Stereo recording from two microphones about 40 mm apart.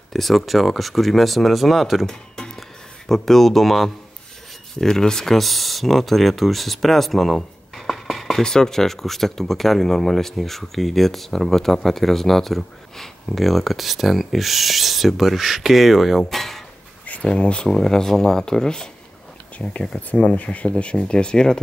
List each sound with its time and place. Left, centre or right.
0.1 s speech: centre
2.0 s music: centre
3.1 s speech: centre
8.4 s speech: centre
17.0 s a sound: left
17.4 s speech: left
17.7 s speech: centre
20.0 s speech: left
20.6 s speech: left